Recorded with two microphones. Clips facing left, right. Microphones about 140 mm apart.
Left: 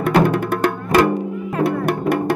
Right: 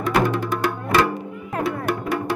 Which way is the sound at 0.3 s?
55° left (ahead or behind).